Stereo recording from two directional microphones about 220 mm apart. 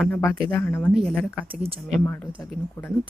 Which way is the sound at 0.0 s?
10° left (ahead or behind).